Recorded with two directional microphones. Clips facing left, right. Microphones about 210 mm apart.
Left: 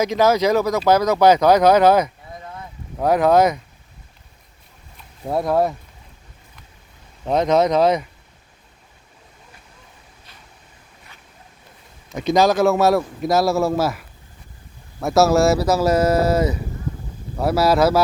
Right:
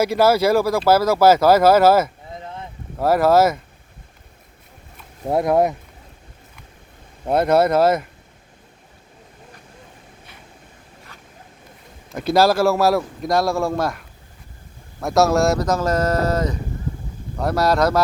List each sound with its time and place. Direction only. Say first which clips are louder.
0.0 s a man's voice: right 1 dB; 10° right (ahead or behind)
2.3 s a sound: right 2 dB; 25° right (ahead or behind)
3.0 s a man's voice: even; 5° right (ahead or behind)
5.5 s speech: right 1 dB; 20° right (ahead or behind)
7.3 s speech: right 1 dB; 10° right (ahead or behind)
12.0 s a man's voice: even; 5° right (ahead or behind)
15.0 s a man's voice: left 2 dB; centre (ahead or behind)